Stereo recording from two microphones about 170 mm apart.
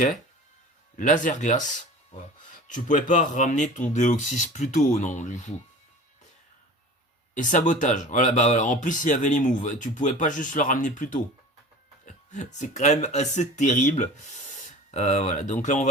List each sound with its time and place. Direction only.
0.9 s speech: 50° left (ahead or behind)
7.3 s speech: 50° left (ahead or behind)